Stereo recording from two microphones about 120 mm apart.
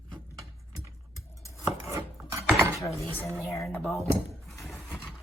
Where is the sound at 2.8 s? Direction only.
25° left (ahead or behind).